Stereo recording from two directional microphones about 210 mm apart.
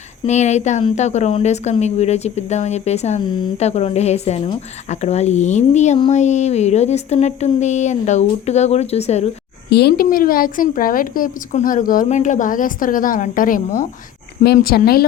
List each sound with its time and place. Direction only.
0.3 s a woman's voice: 35° left (ahead or behind)
9.6 s a woman's voice: 50° left (ahead or behind)